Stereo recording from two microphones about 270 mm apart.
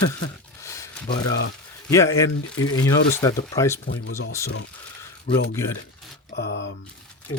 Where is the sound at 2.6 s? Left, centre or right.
Centre.